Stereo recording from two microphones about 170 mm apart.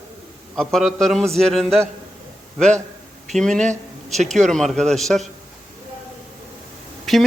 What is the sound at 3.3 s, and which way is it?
Speech, 5° left (ahead or behind).